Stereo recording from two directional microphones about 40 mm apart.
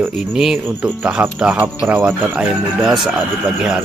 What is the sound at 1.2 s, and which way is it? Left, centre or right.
Speech, right.